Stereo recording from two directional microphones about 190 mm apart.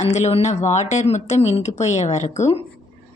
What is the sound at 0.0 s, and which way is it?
Speech, 35° left (ahead or behind).